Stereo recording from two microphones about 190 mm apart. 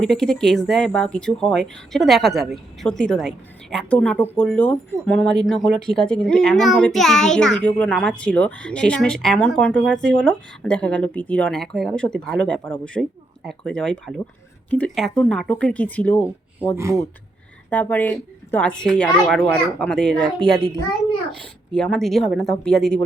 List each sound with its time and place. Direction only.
0.0 s speech: centre (ahead or behind)
16.7 s speech: 15° right (ahead or behind)
17.7 s speech: 10° left (ahead or behind)
21.8 s speech: 5° left (ahead or behind)